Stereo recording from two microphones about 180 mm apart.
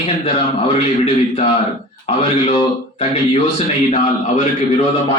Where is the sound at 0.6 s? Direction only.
35° left (ahead or behind).